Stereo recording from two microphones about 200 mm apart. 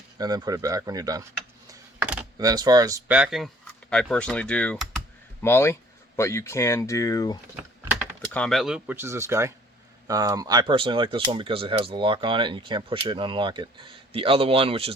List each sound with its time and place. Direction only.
0.2 s speech: 20° right (ahead or behind)
2.4 s speech: 20° right (ahead or behind)
3.1 s speech: 5° right (ahead or behind); by 7.3 s 15° left (ahead or behind)
8.3 s speech: 5° left (ahead or behind); by 14.9 s 30° right (ahead or behind)